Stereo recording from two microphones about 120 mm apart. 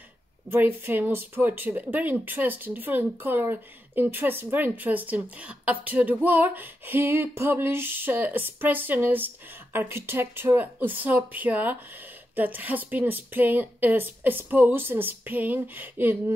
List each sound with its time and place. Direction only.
0.5 s speech: 15° right (ahead or behind)